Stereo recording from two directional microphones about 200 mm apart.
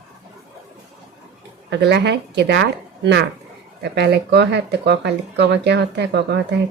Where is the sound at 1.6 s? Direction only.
55° right (ahead or behind).